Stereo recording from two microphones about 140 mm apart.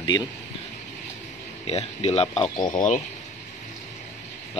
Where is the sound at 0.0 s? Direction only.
30° left (ahead or behind).